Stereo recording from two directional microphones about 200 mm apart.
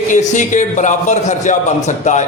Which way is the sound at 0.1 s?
40° left (ahead or behind).